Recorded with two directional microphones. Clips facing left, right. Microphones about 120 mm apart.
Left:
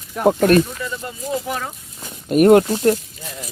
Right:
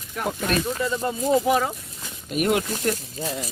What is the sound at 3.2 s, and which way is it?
Speech, 30° right (ahead or behind).